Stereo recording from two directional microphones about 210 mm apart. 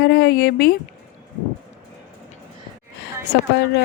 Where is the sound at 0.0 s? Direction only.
50° left (ahead or behind).